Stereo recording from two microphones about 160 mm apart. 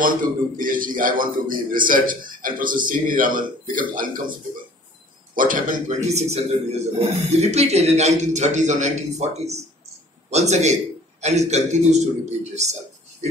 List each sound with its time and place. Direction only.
0.0 s a man's voice: 60° right (ahead or behind)